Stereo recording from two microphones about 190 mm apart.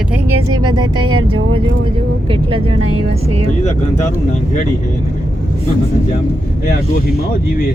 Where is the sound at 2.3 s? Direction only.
30° right (ahead or behind).